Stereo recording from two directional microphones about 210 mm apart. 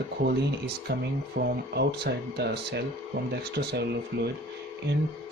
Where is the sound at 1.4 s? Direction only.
50° right (ahead or behind).